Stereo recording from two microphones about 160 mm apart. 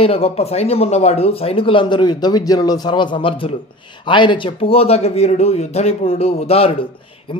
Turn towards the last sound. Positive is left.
turn(degrees=35)  # may be behind; listen again after turning